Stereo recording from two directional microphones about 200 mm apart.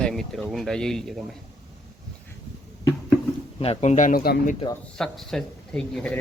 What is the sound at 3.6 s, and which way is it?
Speech, 30° left (ahead or behind).